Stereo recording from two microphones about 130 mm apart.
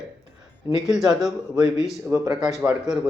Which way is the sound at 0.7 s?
15° right (ahead or behind).